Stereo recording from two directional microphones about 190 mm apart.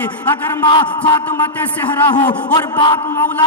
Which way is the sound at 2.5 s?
20° left (ahead or behind).